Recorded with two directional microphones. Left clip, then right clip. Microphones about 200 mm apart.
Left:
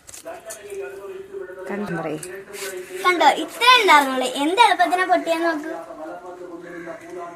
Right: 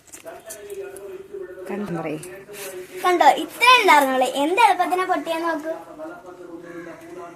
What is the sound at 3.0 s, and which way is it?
A child's voice, 15° right (ahead or behind).